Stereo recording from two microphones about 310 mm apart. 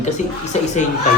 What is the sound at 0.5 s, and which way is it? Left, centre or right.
Speech, left.